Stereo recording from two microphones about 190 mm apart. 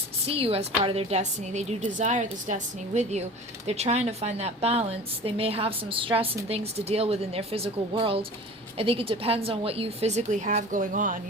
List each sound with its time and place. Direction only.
0.3 s a woman's voice: 30° right (ahead or behind)